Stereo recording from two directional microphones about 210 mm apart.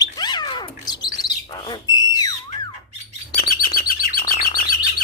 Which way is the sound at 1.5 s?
20° left (ahead or behind).